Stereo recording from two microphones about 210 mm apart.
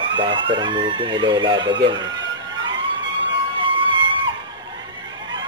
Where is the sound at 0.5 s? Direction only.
20° right (ahead or behind).